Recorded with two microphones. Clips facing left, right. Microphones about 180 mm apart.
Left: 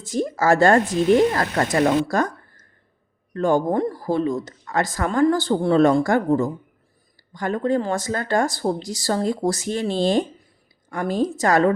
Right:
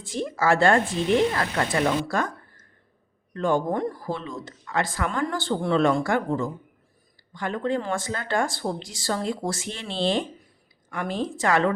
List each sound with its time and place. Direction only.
0.0 s speech: 40° left (ahead or behind)